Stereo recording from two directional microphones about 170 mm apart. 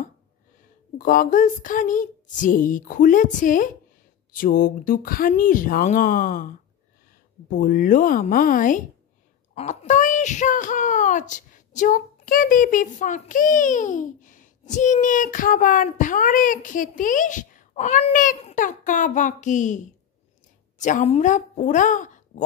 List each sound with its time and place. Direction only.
0.9 s a woman's voice: 50° left (ahead or behind)